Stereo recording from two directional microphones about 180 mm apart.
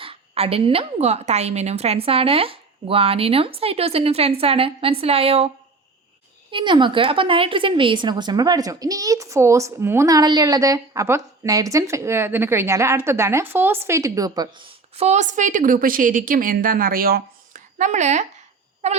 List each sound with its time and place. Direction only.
0.0 s a woman's voice: 30° right (ahead or behind)
6.5 s a woman's voice: 25° right (ahead or behind)